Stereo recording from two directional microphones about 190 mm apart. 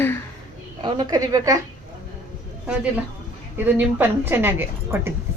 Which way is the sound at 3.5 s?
10° right (ahead or behind).